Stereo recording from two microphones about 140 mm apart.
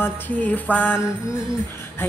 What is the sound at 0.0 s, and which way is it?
Music, 10° left (ahead or behind).